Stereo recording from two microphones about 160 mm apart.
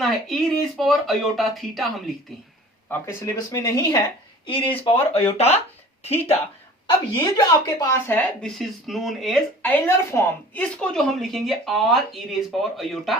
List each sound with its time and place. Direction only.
0.0 s a woman's voice: centre (ahead or behind)
2.9 s speech: 15° left (ahead or behind)
4.4 s speech: 30° left (ahead or behind)
7.2 s speech: 25° left (ahead or behind); by 9.4 s centre (ahead or behind)
9.6 s a woman's voice: 15° left (ahead or behind)